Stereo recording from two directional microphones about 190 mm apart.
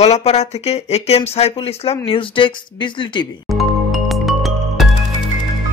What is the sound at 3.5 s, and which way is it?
Music, centre (ahead or behind).